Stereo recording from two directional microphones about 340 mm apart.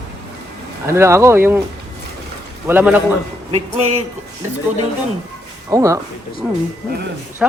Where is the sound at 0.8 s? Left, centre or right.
Centre.